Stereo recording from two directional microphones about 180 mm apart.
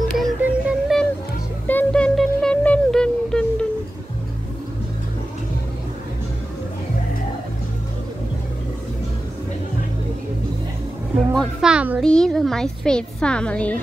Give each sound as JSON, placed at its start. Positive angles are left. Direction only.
{"t": 0.4, "sound": "music", "side_deg": -5}
{"t": 1.7, "sound": "music", "side_deg": 10}
{"t": 11.3, "sound": "music", "side_deg": -5}
{"t": 12.0, "sound": "a woman's voice", "side_deg": 5}